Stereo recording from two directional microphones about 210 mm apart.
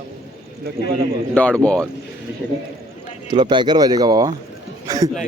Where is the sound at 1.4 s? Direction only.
5° left (ahead or behind).